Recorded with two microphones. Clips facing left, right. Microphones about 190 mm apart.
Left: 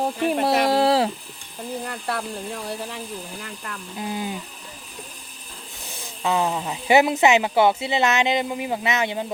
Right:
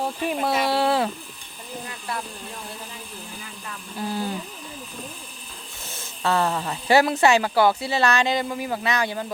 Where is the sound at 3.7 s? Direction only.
70° left (ahead or behind).